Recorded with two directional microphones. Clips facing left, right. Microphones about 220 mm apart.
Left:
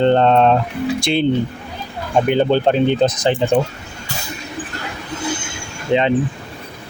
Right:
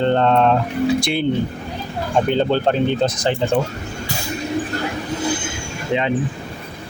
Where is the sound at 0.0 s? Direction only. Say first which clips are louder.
Left 3 dB; 20° left (ahead or behind).